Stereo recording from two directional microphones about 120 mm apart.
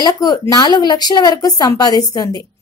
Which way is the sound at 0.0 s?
35° left (ahead or behind).